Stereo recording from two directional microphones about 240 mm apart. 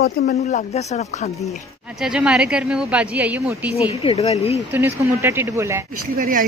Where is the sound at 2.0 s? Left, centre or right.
Centre.